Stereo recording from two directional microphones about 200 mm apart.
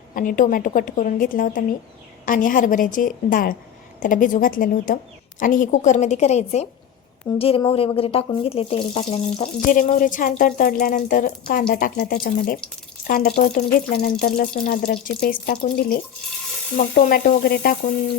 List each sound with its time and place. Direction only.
0.1 s a woman's voice: 40° left (ahead or behind)
9.6 s speech: 45° left (ahead or behind)
16.7 s speech: 45° left (ahead or behind)